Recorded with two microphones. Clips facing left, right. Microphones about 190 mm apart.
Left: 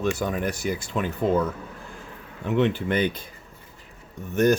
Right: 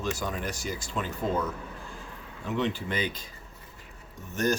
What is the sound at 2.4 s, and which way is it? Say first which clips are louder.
Speech: left 7 dB; 60° left (ahead or behind).